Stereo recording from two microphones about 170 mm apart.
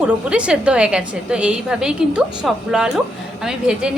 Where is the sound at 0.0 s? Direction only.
5° right (ahead or behind).